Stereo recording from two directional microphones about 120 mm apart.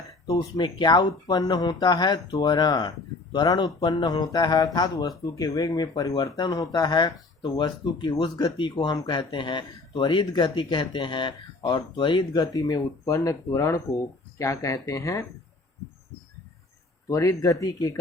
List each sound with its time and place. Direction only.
0.3 s speech: 40° left (ahead or behind)
17.1 s speech: 25° left (ahead or behind)